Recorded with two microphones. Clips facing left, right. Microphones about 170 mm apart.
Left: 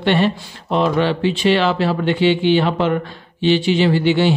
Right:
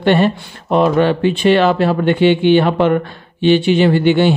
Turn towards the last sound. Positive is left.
turn(degrees=-55)  # may be behind; listen again after turning